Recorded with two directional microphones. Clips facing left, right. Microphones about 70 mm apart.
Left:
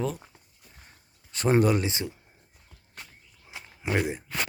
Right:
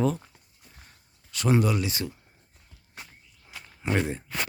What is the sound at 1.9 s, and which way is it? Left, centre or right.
Speech, left.